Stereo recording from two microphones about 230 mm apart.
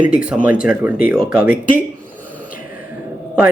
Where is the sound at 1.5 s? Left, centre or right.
Left.